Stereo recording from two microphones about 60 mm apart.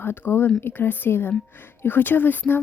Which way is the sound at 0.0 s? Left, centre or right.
Left.